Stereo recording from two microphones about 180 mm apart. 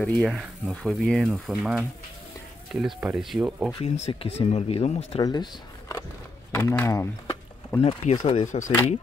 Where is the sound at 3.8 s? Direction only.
35° left (ahead or behind).